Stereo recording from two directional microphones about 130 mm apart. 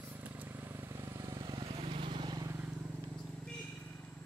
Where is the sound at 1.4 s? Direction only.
40° right (ahead or behind).